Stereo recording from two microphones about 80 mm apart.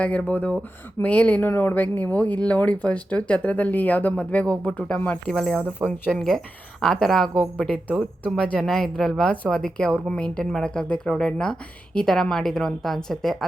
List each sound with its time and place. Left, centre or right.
0.0 s speech: centre
4.9 s speech: left
5.3 s a woman's voice: centre
7.6 s a woman's voice: centre